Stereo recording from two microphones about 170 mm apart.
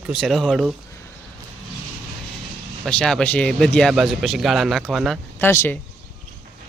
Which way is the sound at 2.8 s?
5° left (ahead or behind).